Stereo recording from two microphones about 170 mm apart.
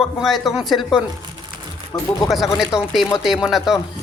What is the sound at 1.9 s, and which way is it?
Speech, 20° left (ahead or behind).